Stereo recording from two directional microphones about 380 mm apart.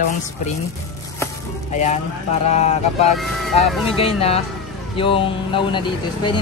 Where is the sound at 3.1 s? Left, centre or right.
Centre.